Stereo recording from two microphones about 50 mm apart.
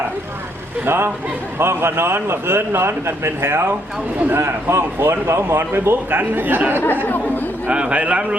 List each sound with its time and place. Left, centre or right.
0.9 s a man's voice: right
7.7 s a man's voice: right